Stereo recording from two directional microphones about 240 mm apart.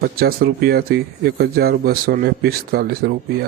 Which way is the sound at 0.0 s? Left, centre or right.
Right.